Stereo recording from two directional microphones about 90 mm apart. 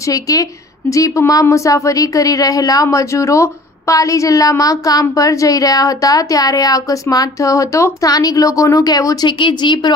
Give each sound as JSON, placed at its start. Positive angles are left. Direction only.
{"t": 0.0, "sound": "a woman's voice", "side_deg": 40}
{"t": 9.4, "sound": "speech", "side_deg": 60}